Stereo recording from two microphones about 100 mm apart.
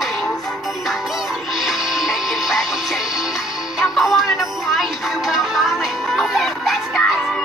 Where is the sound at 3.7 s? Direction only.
Centre (ahead or behind).